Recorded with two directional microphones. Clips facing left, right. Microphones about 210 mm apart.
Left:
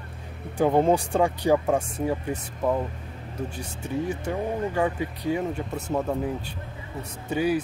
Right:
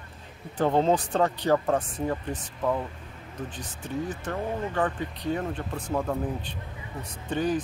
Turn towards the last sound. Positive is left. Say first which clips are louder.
# left 2 dB
turn(degrees=10)  # may be behind; listen again after turning